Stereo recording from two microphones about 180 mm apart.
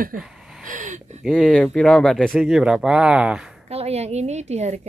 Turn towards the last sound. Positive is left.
turn(degrees=-35)  # may be behind; listen again after turning